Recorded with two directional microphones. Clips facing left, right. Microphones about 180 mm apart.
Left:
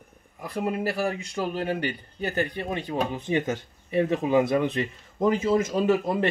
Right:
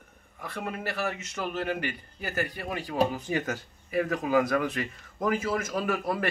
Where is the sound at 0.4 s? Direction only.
5° left (ahead or behind).